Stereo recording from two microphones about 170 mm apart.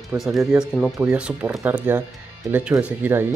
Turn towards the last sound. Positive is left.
turn(degrees=-10)  # may be behind; listen again after turning